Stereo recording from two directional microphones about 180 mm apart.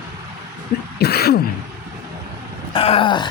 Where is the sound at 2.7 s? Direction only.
30° left (ahead or behind).